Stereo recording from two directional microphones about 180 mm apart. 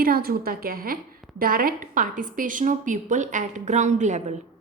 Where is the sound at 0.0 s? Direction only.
55° right (ahead or behind).